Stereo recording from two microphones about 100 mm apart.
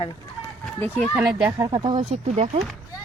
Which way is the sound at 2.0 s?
90° right.